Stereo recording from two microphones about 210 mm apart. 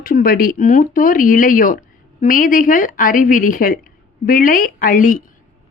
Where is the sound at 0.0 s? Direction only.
45° left (ahead or behind).